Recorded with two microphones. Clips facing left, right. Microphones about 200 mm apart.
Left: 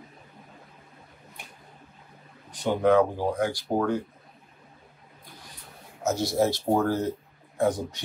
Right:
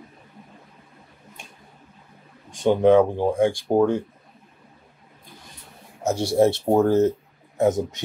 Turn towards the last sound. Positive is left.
turn(degrees=-20)  # may be behind; listen again after turning